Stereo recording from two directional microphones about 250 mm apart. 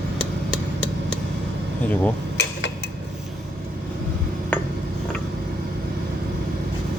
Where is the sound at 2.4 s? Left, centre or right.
Left.